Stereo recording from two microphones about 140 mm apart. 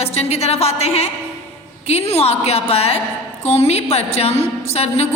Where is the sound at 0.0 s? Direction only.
50° left (ahead or behind).